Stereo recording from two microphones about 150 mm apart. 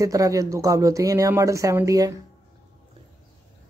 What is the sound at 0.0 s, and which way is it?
Speech, 20° right (ahead or behind).